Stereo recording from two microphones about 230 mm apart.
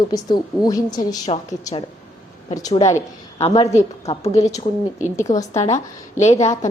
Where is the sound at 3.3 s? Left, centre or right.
Left.